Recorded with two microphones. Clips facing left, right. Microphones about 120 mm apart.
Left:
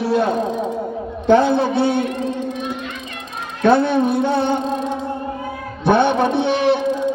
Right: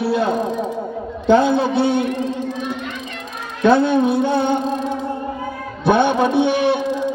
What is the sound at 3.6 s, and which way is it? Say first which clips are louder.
Music: right 1 dB; 15° right (ahead or behind).